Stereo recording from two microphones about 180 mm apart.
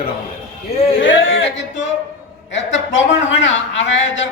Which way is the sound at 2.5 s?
90° left.